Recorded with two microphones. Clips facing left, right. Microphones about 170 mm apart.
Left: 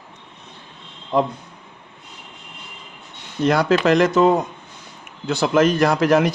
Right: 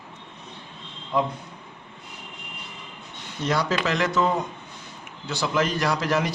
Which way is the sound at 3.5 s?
55° left (ahead or behind).